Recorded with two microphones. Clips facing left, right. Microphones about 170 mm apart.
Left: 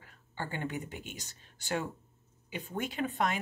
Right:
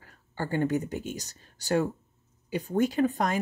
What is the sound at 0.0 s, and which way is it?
Speech, 40° right (ahead or behind).